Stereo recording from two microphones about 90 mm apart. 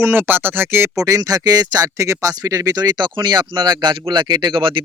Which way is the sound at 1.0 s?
40° right (ahead or behind).